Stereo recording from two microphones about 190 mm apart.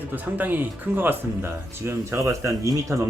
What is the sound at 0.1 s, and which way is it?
Speech, 10° right (ahead or behind).